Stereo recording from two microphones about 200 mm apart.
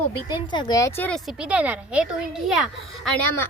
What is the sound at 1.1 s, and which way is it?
Speech, centre (ahead or behind).